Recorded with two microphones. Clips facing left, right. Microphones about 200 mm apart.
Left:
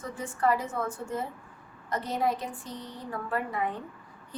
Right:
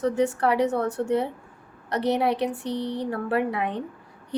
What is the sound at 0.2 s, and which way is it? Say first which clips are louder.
A woman's voice: right 3 dB; 70° right (ahead or behind).